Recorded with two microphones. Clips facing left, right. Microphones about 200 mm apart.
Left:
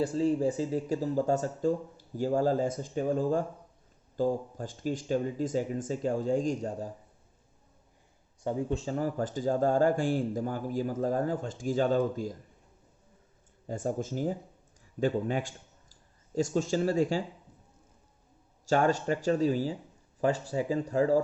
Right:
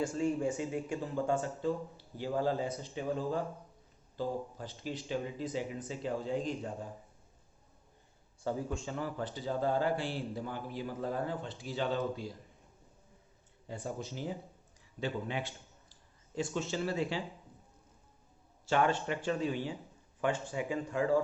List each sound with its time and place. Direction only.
0.0 s speech: 35° left (ahead or behind)
8.7 s speech: 35° left (ahead or behind)
13.7 s speech: 45° left (ahead or behind)
18.7 s speech: 40° left (ahead or behind)